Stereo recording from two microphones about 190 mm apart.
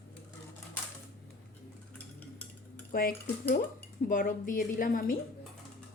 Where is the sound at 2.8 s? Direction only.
55° left (ahead or behind).